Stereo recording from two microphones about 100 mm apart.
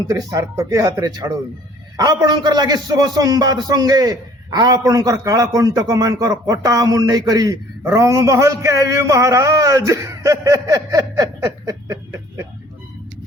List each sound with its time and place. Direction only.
0.1 s a man's voice: 35° right (ahead or behind)